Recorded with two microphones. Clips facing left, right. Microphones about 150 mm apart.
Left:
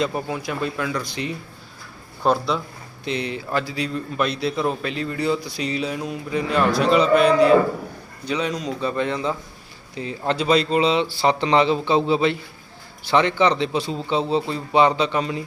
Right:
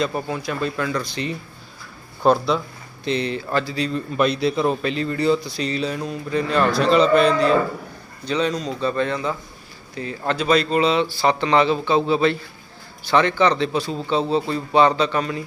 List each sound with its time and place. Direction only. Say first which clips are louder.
0.0 s speech: right 1 dB; 10° left (ahead or behind)
3.0 s speech: right 3 dB; 10° left (ahead or behind)